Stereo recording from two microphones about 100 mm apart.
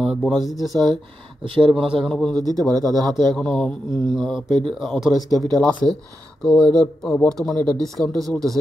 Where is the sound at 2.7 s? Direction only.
40° right (ahead or behind).